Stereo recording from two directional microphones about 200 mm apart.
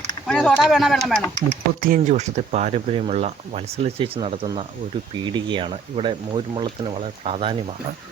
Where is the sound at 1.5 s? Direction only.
45° right (ahead or behind).